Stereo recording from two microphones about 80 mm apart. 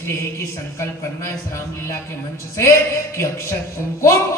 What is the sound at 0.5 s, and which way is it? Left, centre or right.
Speech, left.